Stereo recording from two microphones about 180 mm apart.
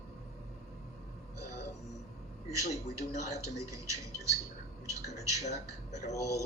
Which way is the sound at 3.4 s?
15° right (ahead or behind).